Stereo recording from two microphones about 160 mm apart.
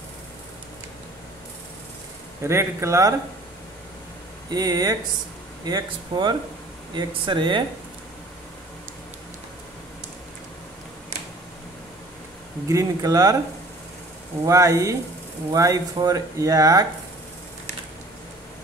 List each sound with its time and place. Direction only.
2.4 s a man's voice: 15° right (ahead or behind)
4.5 s speech: 25° right (ahead or behind)
12.6 s speech: 20° right (ahead or behind)
14.4 s speech: 20° right (ahead or behind)